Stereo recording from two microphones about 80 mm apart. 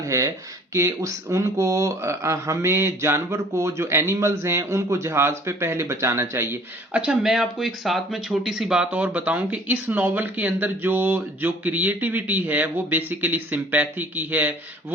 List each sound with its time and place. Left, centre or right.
0.0 s speech: right
6.9 s speech: centre